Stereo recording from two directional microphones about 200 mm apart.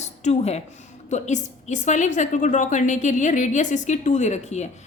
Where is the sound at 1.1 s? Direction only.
35° left (ahead or behind).